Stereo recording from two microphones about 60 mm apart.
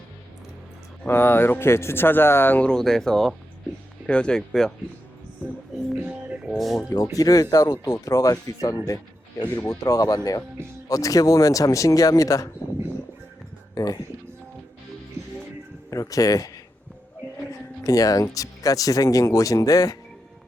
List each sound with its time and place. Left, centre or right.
1.0 s speech: left
2.6 s speech: centre
6.0 s music: centre
6.5 s speech: centre
7.2 s speech: left
7.5 s speech: left
9.6 s speech: left
13.7 s speech: left
15.9 s speech: left
17.8 s speech: left